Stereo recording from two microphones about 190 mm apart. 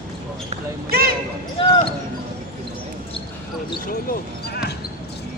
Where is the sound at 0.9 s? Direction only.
55° right (ahead or behind).